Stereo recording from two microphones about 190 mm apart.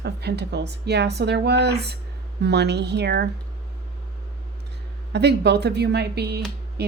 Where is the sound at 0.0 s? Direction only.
60° right (ahead or behind).